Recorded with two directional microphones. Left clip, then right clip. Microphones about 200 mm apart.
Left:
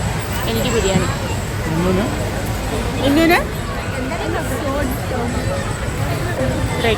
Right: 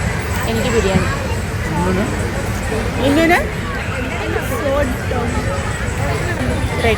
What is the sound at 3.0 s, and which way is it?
Speech, 15° right (ahead or behind).